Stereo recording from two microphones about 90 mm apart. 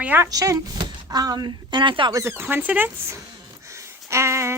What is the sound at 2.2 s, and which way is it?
Speech, 25° right (ahead or behind).